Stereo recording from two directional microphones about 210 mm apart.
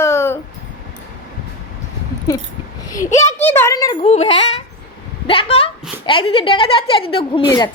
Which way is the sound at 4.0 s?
30° left (ahead or behind).